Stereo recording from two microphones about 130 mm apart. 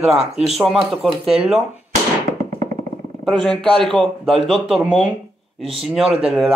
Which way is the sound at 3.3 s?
5° left (ahead or behind).